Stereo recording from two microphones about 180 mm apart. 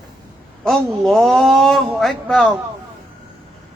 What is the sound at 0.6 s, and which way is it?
A man's voice, centre (ahead or behind).